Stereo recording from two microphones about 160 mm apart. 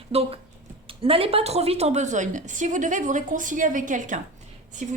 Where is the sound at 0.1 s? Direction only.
40° right (ahead or behind).